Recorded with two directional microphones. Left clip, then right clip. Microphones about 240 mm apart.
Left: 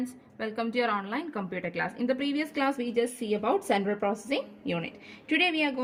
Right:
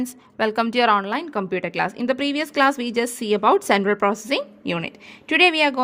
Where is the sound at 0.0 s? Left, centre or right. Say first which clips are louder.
Right 12 dB; right.